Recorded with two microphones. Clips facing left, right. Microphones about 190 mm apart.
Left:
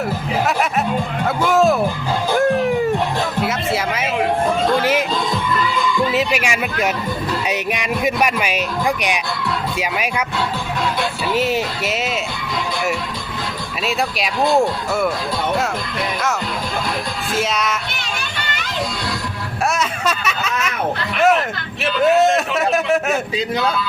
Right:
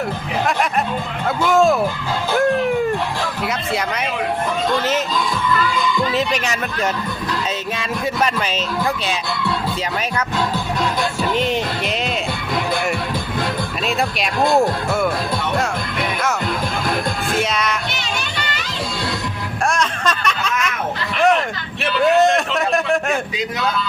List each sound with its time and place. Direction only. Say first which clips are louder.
1.5 s a man's voice: even; centre (ahead or behind)
2.4 s cat: even; centre (ahead or behind)
3.4 s music: left 2 dB; 5° left (ahead or behind)
4.8 s speech: left 2 dB; 10° left (ahead or behind)
11.3 s a man's voice: left 3 dB; 5° left (ahead or behind)
17.3 s a man's voice: left 2 dB; centre (ahead or behind)
19.6 s a man's voice: even; 5° left (ahead or behind)